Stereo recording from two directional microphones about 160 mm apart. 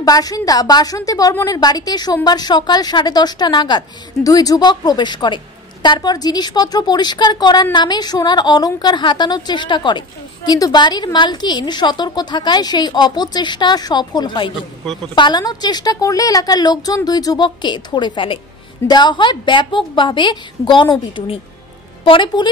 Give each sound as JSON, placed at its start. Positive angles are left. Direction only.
{"t": 0.0, "sound": "a woman's voice", "side_deg": 25}